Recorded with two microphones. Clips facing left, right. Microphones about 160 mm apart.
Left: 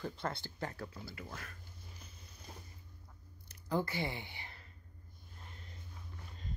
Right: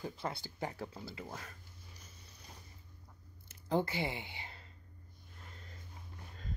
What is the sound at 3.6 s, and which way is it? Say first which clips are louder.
Speech: right 2 dB; 20° right (ahead or behind).